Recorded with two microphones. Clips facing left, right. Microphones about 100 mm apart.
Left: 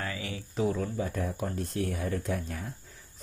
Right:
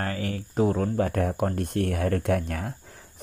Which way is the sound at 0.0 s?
50° right (ahead or behind).